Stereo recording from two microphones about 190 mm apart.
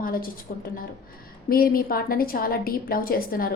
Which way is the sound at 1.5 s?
50° left (ahead or behind).